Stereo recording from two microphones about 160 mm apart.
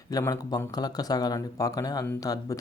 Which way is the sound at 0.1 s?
20° left (ahead or behind).